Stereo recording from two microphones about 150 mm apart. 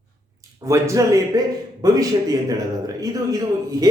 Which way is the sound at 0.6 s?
20° right (ahead or behind).